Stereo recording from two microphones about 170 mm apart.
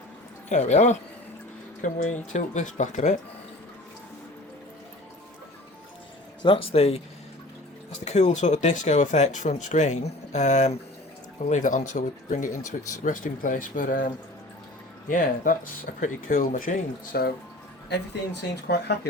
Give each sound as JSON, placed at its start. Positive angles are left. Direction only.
{"t": 0.5, "sound": "speech", "side_deg": 40}
{"t": 6.4, "sound": "speech", "side_deg": 30}
{"t": 8.0, "sound": "speech", "side_deg": 40}
{"t": 15.1, "sound": "speech", "side_deg": 50}
{"t": 17.8, "sound": "speech", "side_deg": 80}